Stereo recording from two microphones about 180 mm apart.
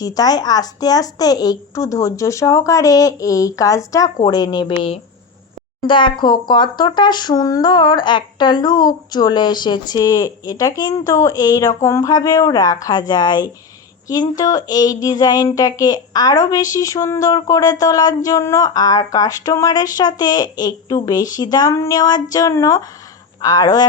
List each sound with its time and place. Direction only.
0.0 s speech: 20° left (ahead or behind)
5.8 s speech: 25° left (ahead or behind)